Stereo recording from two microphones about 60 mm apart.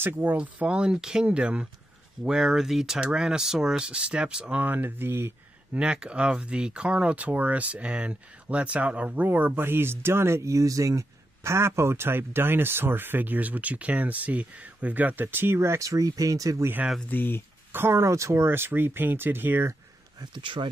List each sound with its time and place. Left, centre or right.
0.0 s speech: right; by 4.6 s centre
4.6 s speech: right
5.7 s speech: centre; by 15.8 s right
15.8 s speech: right
17.1 s speech: left
17.7 s speech: right